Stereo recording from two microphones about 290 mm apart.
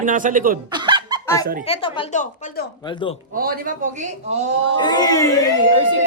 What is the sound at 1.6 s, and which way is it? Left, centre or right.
A woman's voice, centre.